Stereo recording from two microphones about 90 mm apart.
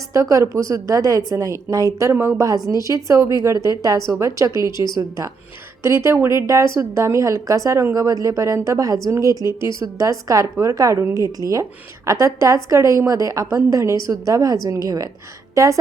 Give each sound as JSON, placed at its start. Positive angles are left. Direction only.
{"t": 0.1, "sound": "a woman's voice", "side_deg": -35}